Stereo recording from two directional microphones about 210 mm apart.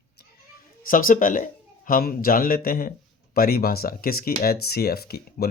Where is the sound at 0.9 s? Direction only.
40° left (ahead or behind).